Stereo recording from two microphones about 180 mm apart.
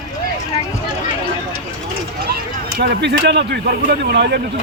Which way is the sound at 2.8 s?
65° right (ahead or behind).